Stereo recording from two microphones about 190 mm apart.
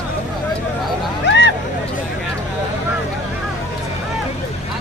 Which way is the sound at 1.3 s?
65° left (ahead or behind).